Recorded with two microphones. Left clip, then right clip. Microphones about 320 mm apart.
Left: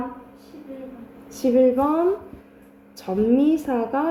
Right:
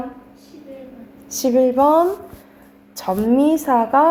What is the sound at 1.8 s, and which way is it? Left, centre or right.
Speech, centre.